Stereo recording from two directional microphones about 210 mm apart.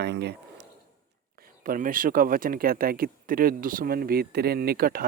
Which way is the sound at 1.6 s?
40° right (ahead or behind).